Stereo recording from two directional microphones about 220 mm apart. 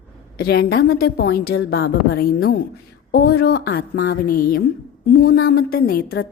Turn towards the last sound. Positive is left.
turn(degrees=40)  # may be behind; listen again after turning